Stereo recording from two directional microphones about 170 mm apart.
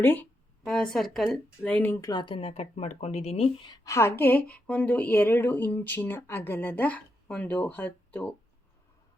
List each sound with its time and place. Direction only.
0.0 s speech: 10° left (ahead or behind); by 3.8 s 35° left (ahead or behind)
3.8 s speech: 15° left (ahead or behind)